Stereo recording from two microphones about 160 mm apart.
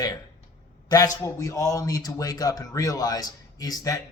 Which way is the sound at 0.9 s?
25° left (ahead or behind).